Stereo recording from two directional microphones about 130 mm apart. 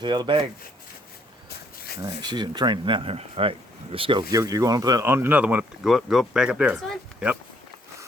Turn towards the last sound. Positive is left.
turn(degrees=0)  # may be behind; listen again after turning